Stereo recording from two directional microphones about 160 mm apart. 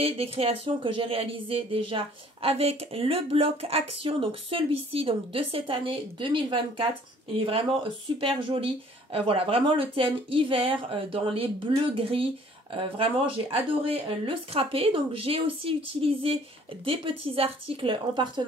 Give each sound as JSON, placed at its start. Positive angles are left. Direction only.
{"t": 0.0, "sound": "speech", "side_deg": -35}